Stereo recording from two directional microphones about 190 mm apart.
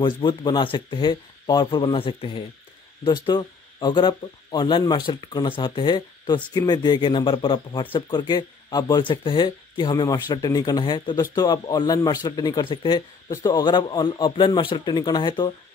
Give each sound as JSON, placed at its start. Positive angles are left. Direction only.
{"t": 0.0, "sound": "speech", "side_deg": 25}